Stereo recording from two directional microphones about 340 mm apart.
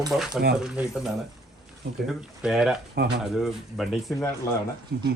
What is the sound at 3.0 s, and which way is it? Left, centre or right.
Speech, right.